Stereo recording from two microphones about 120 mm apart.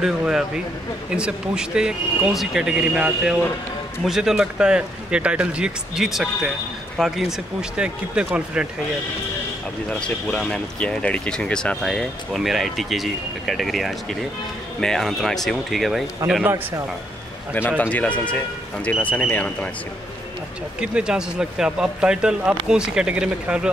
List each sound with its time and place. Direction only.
0.0 s speech: 5° right (ahead or behind)
9.8 s speech: 10° left (ahead or behind)
16.2 s speech: 25° right (ahead or behind)
17.6 s speech: 10° left (ahead or behind)
20.8 s speech: 5° right (ahead or behind)